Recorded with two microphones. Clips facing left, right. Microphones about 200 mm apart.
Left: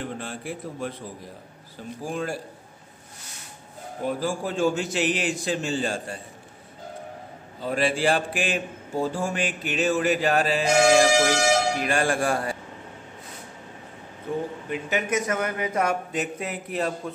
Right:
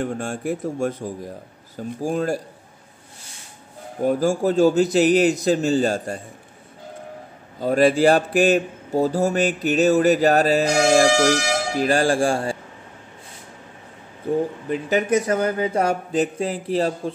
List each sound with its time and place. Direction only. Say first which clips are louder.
0.0 s speech: right 8 dB; 45° right (ahead or behind)
4.0 s speech: right 8 dB; 45° right (ahead or behind)
7.6 s speech: right 8 dB; 45° right (ahead or behind)
14.7 s speech: right 6 dB; 35° right (ahead or behind)